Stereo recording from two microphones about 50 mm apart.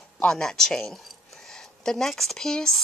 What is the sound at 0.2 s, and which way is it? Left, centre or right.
Speech, centre.